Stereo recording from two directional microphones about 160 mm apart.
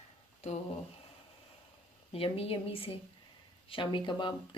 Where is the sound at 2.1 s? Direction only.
35° left (ahead or behind).